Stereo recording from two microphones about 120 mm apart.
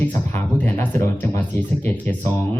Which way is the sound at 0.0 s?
15° left (ahead or behind).